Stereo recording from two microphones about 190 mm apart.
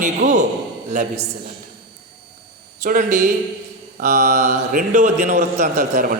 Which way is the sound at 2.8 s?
40° right (ahead or behind).